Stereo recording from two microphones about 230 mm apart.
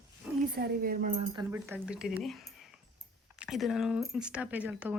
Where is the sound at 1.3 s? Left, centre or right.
Centre.